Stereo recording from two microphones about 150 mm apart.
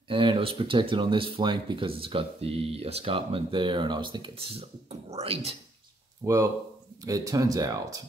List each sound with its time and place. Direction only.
0.1 s speech: 35° right (ahead or behind)
6.2 s speech: 20° right (ahead or behind)